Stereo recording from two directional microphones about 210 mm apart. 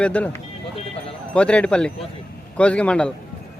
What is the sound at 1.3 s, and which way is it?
Speech, 5° left (ahead or behind).